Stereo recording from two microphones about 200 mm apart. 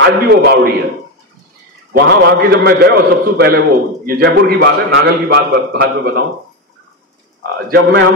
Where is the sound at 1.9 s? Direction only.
55° right (ahead or behind).